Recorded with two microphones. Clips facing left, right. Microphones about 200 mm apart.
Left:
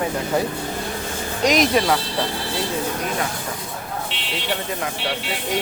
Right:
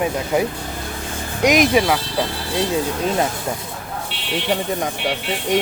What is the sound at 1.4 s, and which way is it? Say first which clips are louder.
Speech: right 3 dB; 10° right (ahead or behind).